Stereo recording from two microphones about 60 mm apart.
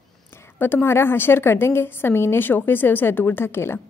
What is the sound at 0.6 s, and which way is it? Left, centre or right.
A woman's voice, left.